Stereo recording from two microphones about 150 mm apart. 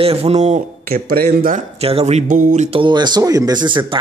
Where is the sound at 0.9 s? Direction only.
80° right.